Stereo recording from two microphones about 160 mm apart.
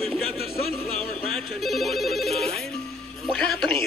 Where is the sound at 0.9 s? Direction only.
40° right (ahead or behind).